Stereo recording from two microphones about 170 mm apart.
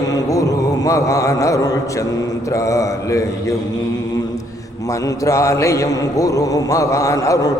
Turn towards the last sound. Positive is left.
turn(degrees=20)  # may be behind; listen again after turning